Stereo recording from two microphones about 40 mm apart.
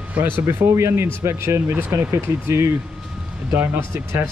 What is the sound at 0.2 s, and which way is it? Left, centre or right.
Speech, right.